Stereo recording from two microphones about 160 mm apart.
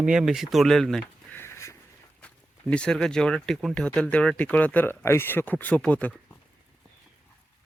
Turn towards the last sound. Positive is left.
turn(degrees=10)  # may be behind; listen again after turning